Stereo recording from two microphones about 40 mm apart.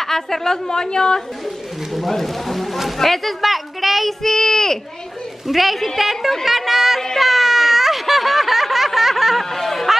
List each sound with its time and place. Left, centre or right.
0.0 s a woman's voice: centre
2.0 s a woman's voice: centre
7.2 s a sound: centre
9.5 s chatter: centre